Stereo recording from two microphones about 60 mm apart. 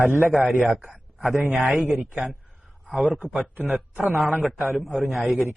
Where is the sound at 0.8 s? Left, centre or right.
Right.